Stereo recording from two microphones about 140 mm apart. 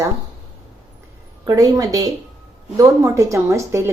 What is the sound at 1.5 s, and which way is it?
A woman's voice, 25° right (ahead or behind).